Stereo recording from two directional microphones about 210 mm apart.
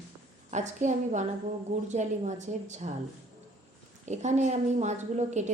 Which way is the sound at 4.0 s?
35° right (ahead or behind).